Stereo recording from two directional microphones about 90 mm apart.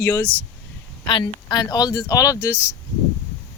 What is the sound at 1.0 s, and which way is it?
Speech, 65° left (ahead or behind).